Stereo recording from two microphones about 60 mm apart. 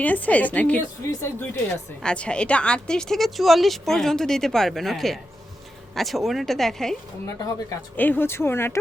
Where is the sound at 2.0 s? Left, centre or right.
Centre.